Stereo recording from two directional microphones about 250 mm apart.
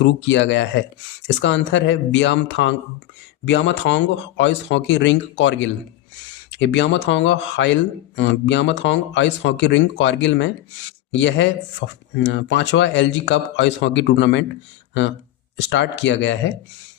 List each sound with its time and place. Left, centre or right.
0.2 s speech: left
15.5 s speech: left